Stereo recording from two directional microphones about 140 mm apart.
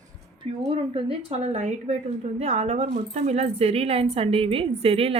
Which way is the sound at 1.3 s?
55° right (ahead or behind).